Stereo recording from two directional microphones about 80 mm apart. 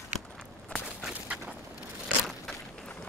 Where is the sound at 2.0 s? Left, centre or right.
Centre.